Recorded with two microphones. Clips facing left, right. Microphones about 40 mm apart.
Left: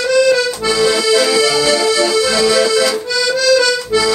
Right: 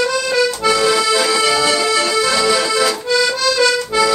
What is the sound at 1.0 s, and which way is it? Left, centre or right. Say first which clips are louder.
Accordion: left 3 dB; centre.